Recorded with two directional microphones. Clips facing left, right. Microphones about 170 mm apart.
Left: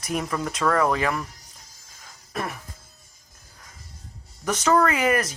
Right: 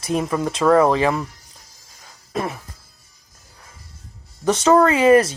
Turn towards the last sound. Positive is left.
turn(degrees=-30)  # may be behind; listen again after turning